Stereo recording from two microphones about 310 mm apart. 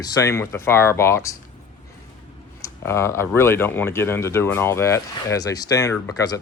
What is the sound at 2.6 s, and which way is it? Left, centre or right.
Speech, centre.